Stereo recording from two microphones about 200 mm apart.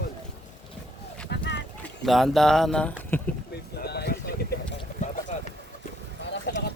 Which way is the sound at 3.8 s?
55° left (ahead or behind).